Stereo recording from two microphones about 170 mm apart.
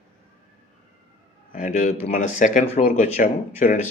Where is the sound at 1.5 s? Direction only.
45° left (ahead or behind).